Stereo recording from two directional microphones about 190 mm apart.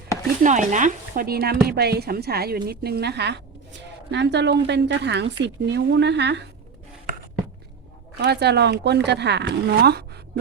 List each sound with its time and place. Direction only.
0.4 s speech: 40° right (ahead or behind); by 6.4 s 65° right (ahead or behind)
8.2 s speech: 60° right (ahead or behind)